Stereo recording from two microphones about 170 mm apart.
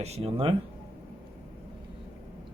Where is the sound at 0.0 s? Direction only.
40° right (ahead or behind).